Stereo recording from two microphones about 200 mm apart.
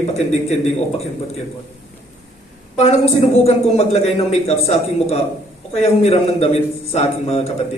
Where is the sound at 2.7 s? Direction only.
30° left (ahead or behind).